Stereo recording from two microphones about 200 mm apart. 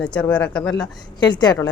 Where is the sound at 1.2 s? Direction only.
20° left (ahead or behind).